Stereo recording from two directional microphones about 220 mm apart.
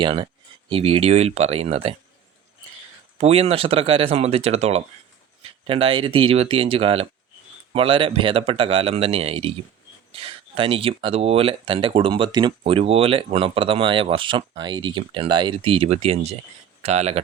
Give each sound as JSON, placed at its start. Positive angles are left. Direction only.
{"t": 0.0, "sound": "speech", "side_deg": -20}
{"t": 3.2, "sound": "speech", "side_deg": -30}